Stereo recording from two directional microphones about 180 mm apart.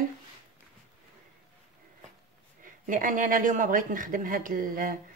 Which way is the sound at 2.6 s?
50° right (ahead or behind).